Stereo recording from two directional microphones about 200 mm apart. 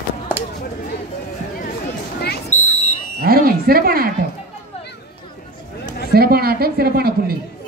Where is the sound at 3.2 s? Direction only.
50° right (ahead or behind).